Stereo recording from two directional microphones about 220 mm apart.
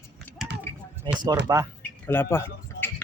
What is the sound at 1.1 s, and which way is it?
Speech, 20° right (ahead or behind).